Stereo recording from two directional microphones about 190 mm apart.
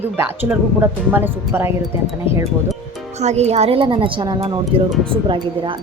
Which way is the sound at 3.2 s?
35° right (ahead or behind).